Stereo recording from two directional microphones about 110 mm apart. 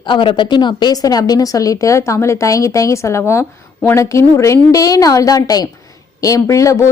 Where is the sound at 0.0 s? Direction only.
45° left (ahead or behind).